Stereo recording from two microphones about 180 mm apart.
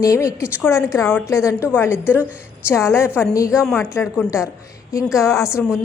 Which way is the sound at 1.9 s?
10° right (ahead or behind).